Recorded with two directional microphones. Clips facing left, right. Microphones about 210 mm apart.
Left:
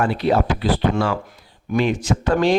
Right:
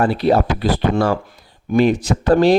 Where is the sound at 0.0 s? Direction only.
35° right (ahead or behind).